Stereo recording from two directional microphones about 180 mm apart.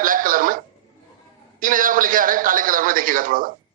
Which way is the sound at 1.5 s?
50° right (ahead or behind).